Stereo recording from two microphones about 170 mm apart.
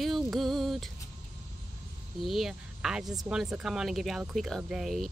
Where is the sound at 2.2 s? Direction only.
Centre (ahead or behind).